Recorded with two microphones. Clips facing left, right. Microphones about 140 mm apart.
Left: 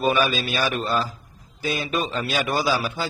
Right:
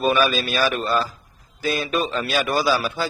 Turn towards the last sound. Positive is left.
turn(degrees=15)  # may be behind; listen again after turning